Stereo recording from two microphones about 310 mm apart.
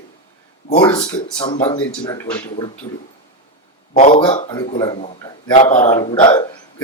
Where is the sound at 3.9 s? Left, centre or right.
Left.